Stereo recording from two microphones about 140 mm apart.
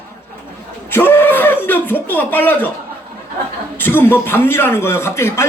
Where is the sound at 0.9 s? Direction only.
15° left (ahead or behind).